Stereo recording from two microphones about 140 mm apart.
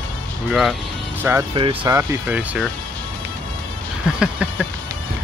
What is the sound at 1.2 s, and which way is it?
Speech, 15° right (ahead or behind).